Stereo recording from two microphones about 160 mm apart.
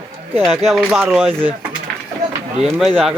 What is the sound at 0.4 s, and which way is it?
Speech, centre (ahead or behind).